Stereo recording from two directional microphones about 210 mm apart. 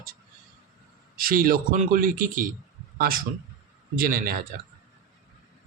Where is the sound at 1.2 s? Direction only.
40° right (ahead or behind).